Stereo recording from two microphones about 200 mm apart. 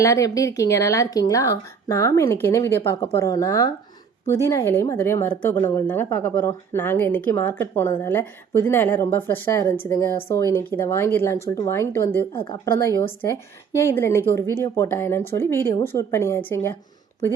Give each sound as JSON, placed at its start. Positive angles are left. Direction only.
{"t": 0.0, "sound": "a woman's voice", "side_deg": 15}
{"t": 12.3, "sound": "a woman's voice", "side_deg": 25}
{"t": 13.7, "sound": "a woman's voice", "side_deg": 10}